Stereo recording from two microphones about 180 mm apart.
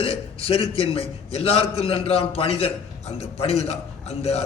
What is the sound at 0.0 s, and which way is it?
A man's voice, 30° left (ahead or behind).